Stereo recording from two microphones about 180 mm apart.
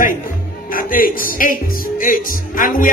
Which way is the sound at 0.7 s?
50° left (ahead or behind).